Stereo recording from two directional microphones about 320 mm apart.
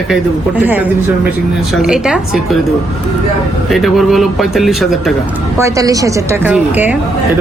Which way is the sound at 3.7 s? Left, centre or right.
Centre.